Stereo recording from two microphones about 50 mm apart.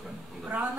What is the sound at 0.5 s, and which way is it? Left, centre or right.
Speech, right.